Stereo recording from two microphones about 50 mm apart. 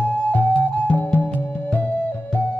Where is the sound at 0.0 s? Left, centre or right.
Left.